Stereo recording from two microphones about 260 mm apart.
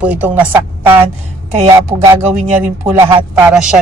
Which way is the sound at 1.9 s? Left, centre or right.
Centre.